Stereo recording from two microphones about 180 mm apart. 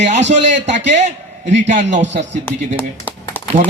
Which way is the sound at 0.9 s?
40° right (ahead or behind).